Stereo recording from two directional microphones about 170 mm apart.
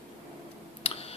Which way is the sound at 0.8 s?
35° left (ahead or behind).